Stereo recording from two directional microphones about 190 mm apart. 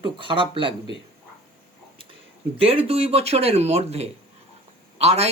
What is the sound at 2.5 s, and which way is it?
Speech, 30° right (ahead or behind).